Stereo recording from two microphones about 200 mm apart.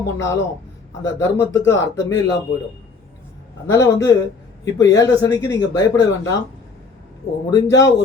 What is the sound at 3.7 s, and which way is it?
Speech, 15° left (ahead or behind).